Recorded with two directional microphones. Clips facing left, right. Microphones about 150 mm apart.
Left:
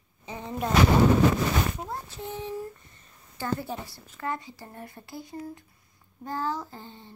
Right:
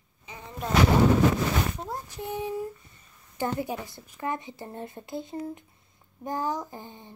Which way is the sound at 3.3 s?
15° right (ahead or behind).